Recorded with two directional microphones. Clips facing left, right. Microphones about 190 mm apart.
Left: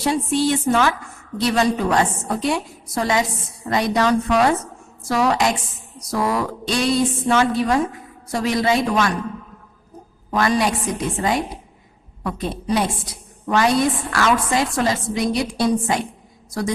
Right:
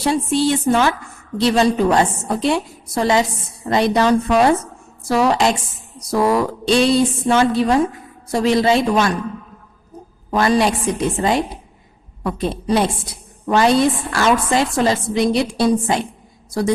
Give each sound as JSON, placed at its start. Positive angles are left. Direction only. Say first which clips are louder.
{"t": 0.1, "sound": "a woman's voice", "louder": "right 2 dB", "side_deg": -30}
{"t": 10.3, "sound": "a woman's voice", "louder": "right 3 dB", "side_deg": -30}